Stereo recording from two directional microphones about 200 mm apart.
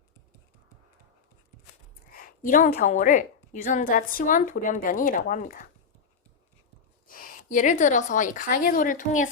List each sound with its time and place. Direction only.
2.1 s a woman's voice: 45° left (ahead or behind)
7.1 s a woman's voice: 45° left (ahead or behind)